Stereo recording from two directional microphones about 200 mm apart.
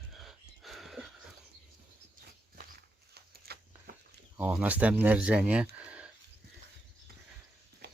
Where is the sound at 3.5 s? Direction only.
50° right (ahead or behind).